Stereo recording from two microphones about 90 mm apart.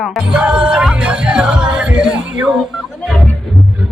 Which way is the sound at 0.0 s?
5° right (ahead or behind).